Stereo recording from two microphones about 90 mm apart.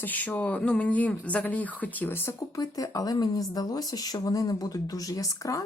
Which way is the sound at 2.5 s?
40° left (ahead or behind).